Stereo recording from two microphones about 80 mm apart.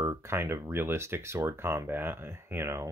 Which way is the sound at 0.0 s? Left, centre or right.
Right.